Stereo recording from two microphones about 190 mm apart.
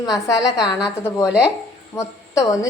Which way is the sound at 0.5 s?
5° right (ahead or behind).